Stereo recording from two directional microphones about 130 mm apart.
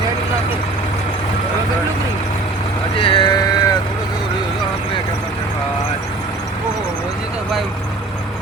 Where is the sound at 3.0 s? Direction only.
40° left (ahead or behind).